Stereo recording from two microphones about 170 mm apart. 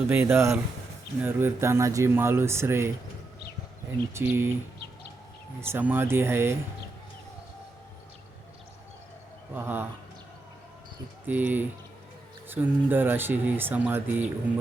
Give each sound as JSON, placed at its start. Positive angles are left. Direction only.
{"t": 0.1, "sound": "speech", "side_deg": -15}
{"t": 4.1, "sound": "speech", "side_deg": -15}
{"t": 5.5, "sound": "speech", "side_deg": -15}
{"t": 9.6, "sound": "speech", "side_deg": -10}
{"t": 11.3, "sound": "speech", "side_deg": -10}